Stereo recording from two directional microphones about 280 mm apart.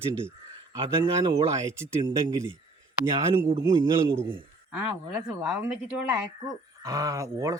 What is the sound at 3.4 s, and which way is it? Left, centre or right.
Speech, centre.